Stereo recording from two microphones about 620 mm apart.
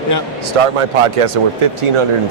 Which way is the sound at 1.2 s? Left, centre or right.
Right.